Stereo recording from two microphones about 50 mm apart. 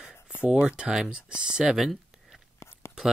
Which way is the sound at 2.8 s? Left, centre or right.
Left.